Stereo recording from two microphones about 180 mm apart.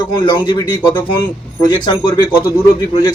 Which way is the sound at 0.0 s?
25° left (ahead or behind).